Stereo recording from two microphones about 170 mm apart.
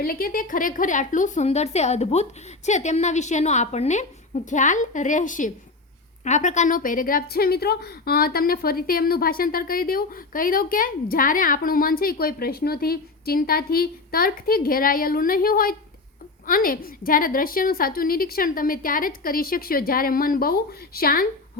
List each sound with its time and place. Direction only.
0.0 s a woman's voice: 55° left (ahead or behind)